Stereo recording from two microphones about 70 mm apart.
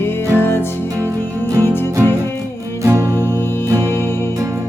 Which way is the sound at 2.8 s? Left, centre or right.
Right.